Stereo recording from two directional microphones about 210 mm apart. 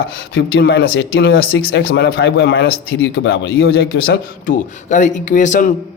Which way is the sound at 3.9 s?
45° left (ahead or behind).